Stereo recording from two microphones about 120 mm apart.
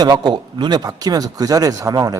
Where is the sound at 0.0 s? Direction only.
35° right (ahead or behind).